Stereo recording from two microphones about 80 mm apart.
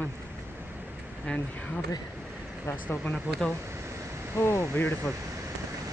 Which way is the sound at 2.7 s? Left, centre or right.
Left.